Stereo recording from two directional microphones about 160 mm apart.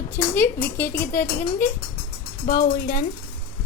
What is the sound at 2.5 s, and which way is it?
Speech, 65° left (ahead or behind).